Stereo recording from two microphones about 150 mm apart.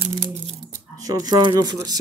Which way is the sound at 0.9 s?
25° right (ahead or behind).